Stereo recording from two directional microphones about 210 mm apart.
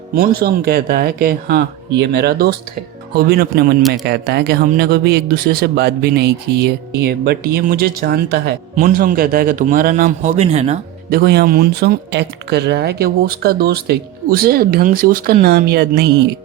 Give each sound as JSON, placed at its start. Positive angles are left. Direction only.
{"t": 0.2, "sound": "speech", "side_deg": -45}
{"t": 8.7, "sound": "a man's voice", "side_deg": -40}
{"t": 11.1, "sound": "speech", "side_deg": -50}